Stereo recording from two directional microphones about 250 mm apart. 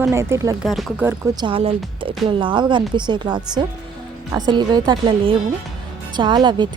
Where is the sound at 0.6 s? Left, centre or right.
Centre.